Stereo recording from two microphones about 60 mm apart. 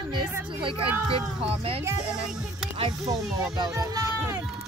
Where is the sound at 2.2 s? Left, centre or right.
Centre.